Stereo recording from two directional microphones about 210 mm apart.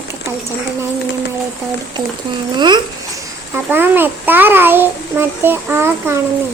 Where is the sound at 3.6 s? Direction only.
10° right (ahead or behind).